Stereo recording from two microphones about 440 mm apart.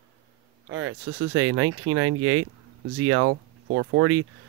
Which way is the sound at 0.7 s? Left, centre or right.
Right.